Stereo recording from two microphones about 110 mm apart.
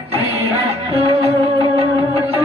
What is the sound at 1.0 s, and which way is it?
Music, 65° right (ahead or behind).